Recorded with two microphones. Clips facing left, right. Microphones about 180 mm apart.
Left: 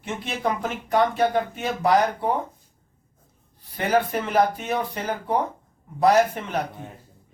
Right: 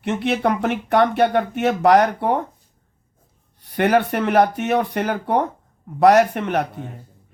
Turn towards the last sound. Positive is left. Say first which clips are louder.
# right 4 dB
turn(degrees=-70)  # may be behind; listen again after turning